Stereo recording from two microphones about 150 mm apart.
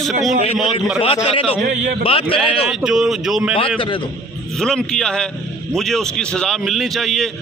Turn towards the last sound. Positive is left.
turn(degrees=0)  # may be behind; listen again after turning